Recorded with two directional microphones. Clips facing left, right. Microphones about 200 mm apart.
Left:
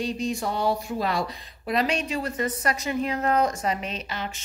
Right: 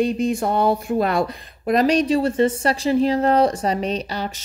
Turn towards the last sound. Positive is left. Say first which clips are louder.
# right 8 dB
turn(degrees=-35)  # may be behind; listen again after turning